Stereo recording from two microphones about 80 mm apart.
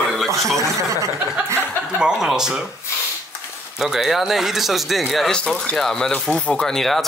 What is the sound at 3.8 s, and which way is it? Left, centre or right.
Speech, centre.